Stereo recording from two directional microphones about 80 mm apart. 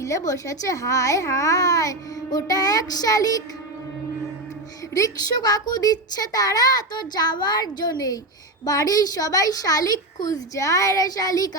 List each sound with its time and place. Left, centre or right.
0.0 s a child's voice: left
4.9 s a child's voice: left